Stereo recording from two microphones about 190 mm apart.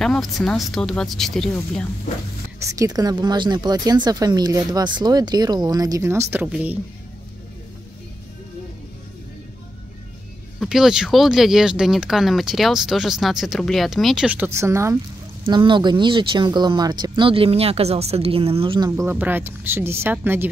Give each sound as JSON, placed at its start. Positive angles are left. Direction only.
{"t": 0.0, "sound": "speech", "side_deg": 0}
{"t": 2.6, "sound": "speech", "side_deg": -15}
{"t": 10.6, "sound": "speech", "side_deg": 0}
{"t": 15.4, "sound": "speech", "side_deg": -25}
{"t": 18.9, "sound": "a woman's voice", "side_deg": -15}